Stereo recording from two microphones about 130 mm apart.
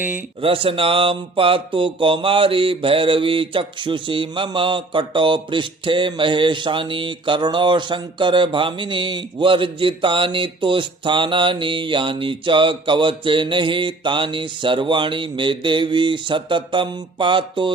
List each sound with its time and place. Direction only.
0.4 s mantra: 45° right (ahead or behind)